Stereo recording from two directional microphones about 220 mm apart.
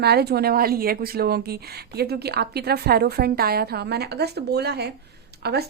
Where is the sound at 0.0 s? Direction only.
45° right (ahead or behind).